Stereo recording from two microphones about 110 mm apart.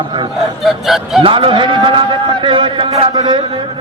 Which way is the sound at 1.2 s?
50° right (ahead or behind).